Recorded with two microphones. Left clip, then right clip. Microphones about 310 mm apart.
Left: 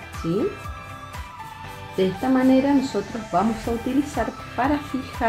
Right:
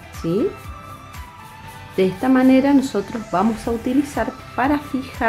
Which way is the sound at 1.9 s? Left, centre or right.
Centre.